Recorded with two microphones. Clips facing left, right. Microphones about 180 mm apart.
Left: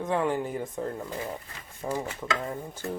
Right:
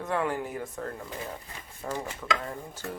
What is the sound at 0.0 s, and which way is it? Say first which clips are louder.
Speech: left 3 dB; 15° left (ahead or behind).